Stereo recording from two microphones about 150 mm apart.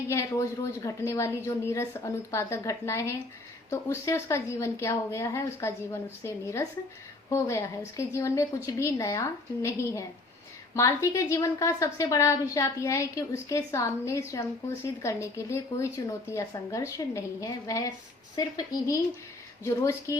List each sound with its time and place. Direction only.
0.1 s a woman's voice: 20° left (ahead or behind)